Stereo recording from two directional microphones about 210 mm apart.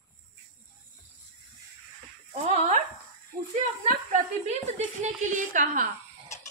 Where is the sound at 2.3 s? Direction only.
35° right (ahead or behind).